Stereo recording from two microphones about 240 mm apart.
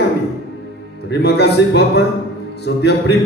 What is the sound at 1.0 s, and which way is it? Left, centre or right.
Speech, left.